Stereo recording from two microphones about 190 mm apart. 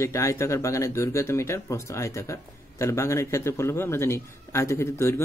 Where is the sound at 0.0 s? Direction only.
15° left (ahead or behind).